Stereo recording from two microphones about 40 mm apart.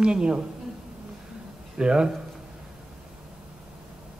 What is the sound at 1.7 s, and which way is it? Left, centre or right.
Speech, right.